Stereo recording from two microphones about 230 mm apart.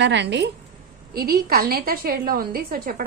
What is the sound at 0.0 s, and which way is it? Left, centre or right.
A woman's voice, right.